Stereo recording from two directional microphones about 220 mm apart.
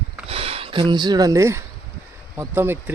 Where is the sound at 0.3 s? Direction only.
25° right (ahead or behind).